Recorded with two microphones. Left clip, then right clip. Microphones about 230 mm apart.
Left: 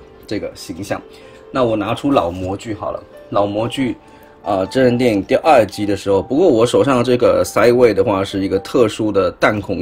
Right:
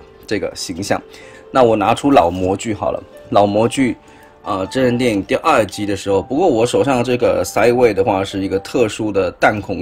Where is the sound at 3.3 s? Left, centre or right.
Right.